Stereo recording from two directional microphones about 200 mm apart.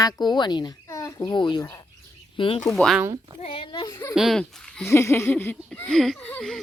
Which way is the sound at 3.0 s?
20° right (ahead or behind).